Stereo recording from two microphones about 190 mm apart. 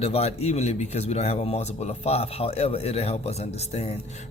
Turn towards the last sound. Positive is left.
turn(degrees=35)  # may be behind; listen again after turning